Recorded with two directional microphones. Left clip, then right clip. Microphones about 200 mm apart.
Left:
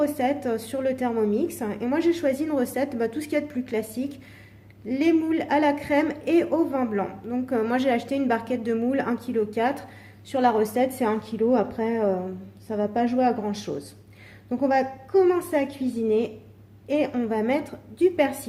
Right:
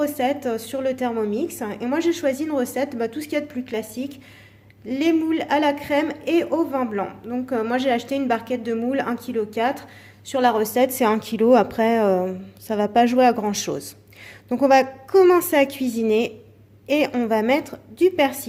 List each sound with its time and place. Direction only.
0.0 s a woman's voice: 10° right (ahead or behind)